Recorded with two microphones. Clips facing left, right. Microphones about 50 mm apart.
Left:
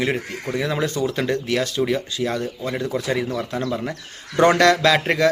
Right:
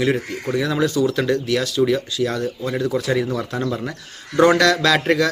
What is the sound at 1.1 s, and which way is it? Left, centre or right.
A man's voice, left.